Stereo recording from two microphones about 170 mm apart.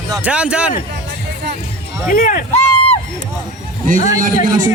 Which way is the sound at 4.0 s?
45° left (ahead or behind).